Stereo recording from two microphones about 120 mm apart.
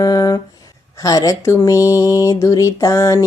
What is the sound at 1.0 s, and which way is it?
Speech, 30° left (ahead or behind).